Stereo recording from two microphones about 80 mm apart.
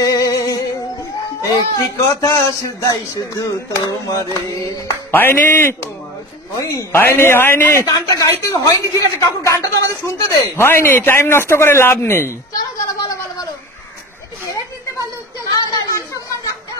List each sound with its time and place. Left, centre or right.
0.0 s music: left
2.2 s a woman's voice: left
5.1 s a man's voice: left
6.5 s a woman's voice: left
6.9 s a man's voice: left
7.8 s a woman's voice: left
10.5 s a man's voice: left
15.4 s a sound: left